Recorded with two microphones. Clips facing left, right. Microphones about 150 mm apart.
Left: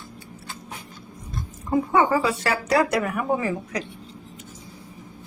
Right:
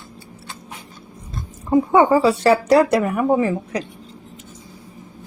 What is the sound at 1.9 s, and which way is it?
Speech, 30° right (ahead or behind).